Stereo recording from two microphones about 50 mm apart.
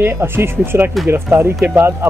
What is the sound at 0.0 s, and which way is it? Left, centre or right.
Speech, right.